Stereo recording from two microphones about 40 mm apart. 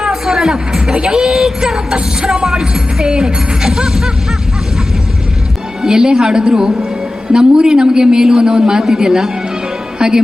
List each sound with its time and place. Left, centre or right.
0.0 s speech: centre
3.8 s music: centre
5.8 s speech: centre